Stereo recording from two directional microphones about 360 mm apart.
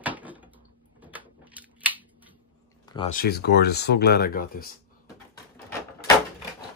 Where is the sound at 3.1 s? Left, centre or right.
Left.